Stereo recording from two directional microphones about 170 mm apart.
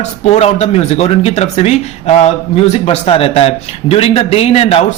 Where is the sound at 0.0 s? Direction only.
40° left (ahead or behind).